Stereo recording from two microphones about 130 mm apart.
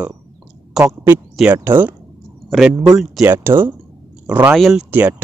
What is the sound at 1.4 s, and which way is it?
Speech, 15° right (ahead or behind).